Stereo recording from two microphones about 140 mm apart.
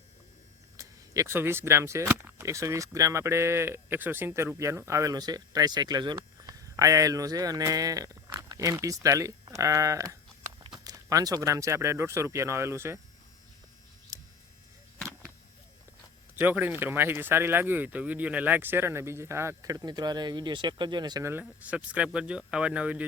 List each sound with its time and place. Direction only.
0.8 s speech: 20° right (ahead or behind)
14.1 s a sound: 20° right (ahead or behind)
16.4 s speech: 10° right (ahead or behind); by 21.2 s 30° right (ahead or behind)
21.6 s speech: 10° right (ahead or behind)